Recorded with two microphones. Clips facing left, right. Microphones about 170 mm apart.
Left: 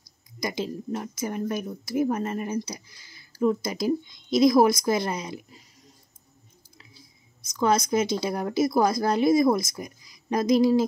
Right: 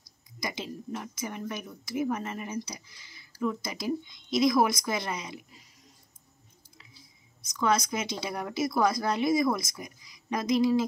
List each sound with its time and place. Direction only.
0.4 s a woman's voice: 40° left (ahead or behind)
7.5 s a woman's voice: 30° left (ahead or behind)